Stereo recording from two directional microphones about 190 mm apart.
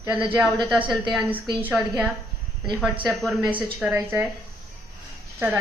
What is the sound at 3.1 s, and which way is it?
Speech, centre (ahead or behind).